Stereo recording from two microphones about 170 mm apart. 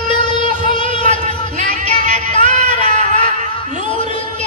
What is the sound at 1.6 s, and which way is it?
Music, 45° right (ahead or behind).